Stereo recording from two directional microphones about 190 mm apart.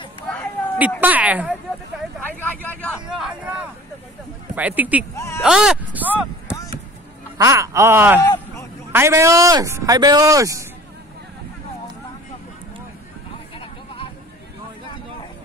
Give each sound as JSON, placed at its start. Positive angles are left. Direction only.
{"t": 1.0, "sound": "speech", "side_deg": -10}
{"t": 2.2, "sound": "vehicle", "side_deg": 10}
{"t": 3.1, "sound": "speech", "side_deg": -5}
{"t": 5.1, "sound": "speech", "side_deg": 15}
{"t": 5.4, "sound": "speech", "side_deg": -5}
{"t": 7.3, "sound": "speech", "side_deg": -15}
{"t": 8.2, "sound": "a sound", "side_deg": 15}
{"t": 8.9, "sound": "speech", "side_deg": -15}